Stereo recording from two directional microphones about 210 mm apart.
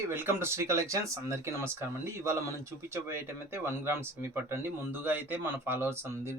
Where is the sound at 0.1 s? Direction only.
10° right (ahead or behind).